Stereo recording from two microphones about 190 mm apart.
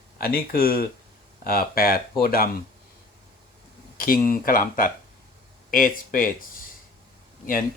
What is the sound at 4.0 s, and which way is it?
Speech, 50° left (ahead or behind).